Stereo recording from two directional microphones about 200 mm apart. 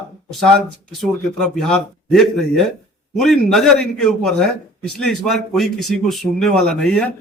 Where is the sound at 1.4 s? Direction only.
Centre (ahead or behind).